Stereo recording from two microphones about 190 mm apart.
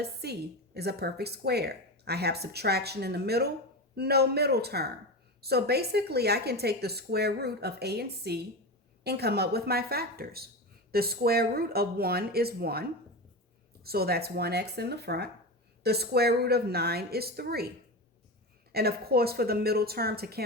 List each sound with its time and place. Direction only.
0.0 s a woman's voice: 60° right (ahead or behind)
18.7 s a woman's voice: 55° right (ahead or behind)